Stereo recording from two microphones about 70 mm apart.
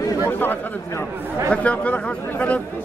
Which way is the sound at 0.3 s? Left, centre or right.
Left.